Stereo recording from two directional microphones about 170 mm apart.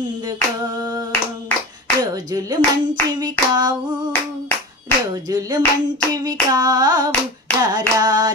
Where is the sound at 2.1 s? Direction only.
20° right (ahead or behind).